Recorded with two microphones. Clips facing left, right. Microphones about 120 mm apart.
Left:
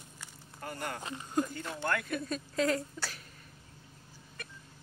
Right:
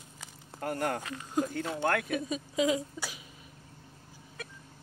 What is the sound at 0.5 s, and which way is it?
Speech, 70° right (ahead or behind).